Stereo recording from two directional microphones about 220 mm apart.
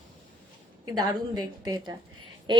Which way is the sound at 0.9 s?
20° right (ahead or behind).